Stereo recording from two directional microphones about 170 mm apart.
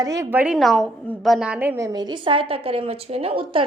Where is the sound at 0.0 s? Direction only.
20° right (ahead or behind).